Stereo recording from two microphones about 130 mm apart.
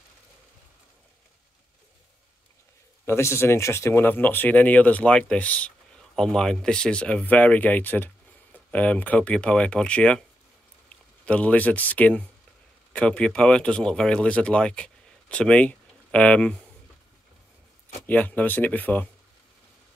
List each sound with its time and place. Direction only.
3.1 s speech: 20° left (ahead or behind)
11.2 s speech: 10° left (ahead or behind)
18.0 s speech: 15° left (ahead or behind)